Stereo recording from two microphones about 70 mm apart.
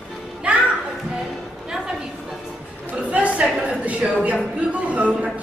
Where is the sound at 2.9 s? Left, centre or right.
Centre.